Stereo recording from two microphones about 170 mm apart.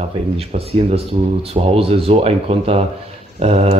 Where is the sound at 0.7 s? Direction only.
35° right (ahead or behind).